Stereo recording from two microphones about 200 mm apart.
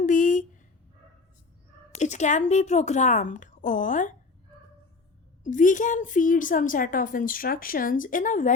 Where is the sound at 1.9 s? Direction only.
35° left (ahead or behind).